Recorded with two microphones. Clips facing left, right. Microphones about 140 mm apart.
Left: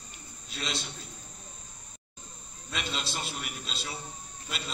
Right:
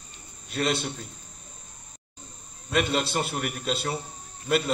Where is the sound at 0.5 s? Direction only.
55° right (ahead or behind).